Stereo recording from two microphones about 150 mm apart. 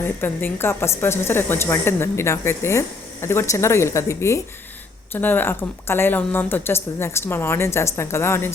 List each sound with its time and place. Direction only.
0.0 s a woman's voice: 15° left (ahead or behind)